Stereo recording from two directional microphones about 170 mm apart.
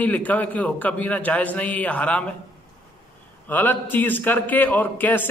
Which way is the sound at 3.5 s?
10° left (ahead or behind).